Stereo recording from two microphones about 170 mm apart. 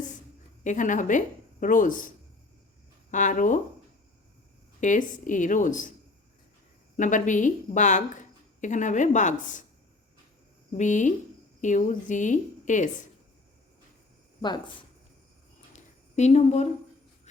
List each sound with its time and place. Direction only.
0.6 s speech: 50° left (ahead or behind)
4.8 s speech: 50° left (ahead or behind)
6.9 s speech: 50° left (ahead or behind)
10.8 s speech: 45° left (ahead or behind)
15.7 s a sound: 40° left (ahead or behind)